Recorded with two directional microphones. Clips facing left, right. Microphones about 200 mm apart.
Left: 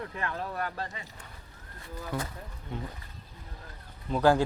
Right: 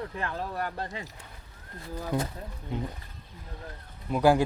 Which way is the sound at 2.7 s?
20° right (ahead or behind).